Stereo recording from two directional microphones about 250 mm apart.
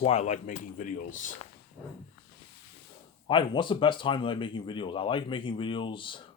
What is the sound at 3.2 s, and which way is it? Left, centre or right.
Speech, centre.